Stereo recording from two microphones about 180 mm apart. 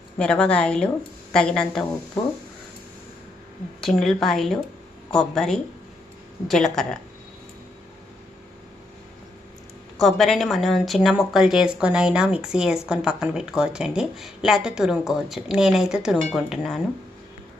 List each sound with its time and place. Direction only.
0.2 s a woman's voice: 5° left (ahead or behind)
3.8 s a woman's voice: centre (ahead or behind)
10.0 s a woman's voice: centre (ahead or behind)